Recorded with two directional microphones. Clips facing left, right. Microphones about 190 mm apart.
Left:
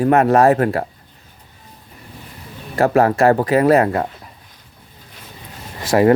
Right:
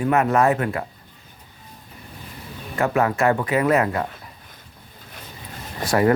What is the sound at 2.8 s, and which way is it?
Speech, 35° left (ahead or behind).